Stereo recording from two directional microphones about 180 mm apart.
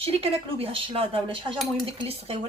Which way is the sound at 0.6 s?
30° right (ahead or behind).